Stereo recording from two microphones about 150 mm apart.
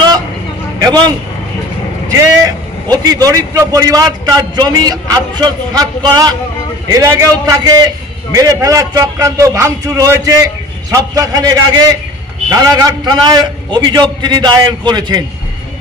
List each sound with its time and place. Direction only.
0.7 s a man's voice: 25° right (ahead or behind)
2.9 s a man's voice: 25° right (ahead or behind)